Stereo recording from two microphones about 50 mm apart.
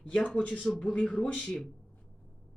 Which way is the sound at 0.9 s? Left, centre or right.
Left.